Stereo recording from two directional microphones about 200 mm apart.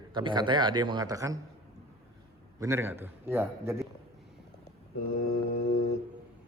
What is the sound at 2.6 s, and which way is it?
A man's voice, 15° right (ahead or behind).